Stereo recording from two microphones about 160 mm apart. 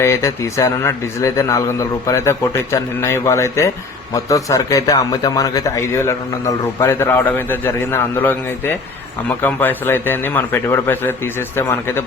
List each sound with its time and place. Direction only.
0.0 s speech: 15° left (ahead or behind)